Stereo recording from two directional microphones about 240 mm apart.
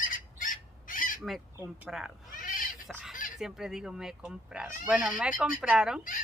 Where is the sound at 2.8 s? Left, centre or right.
Centre.